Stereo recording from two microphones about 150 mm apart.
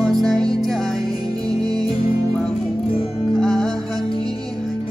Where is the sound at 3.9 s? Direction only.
25° right (ahead or behind).